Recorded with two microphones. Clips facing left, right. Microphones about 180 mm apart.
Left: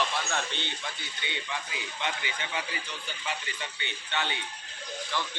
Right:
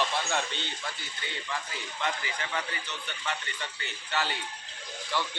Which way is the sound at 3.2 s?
Centre (ahead or behind).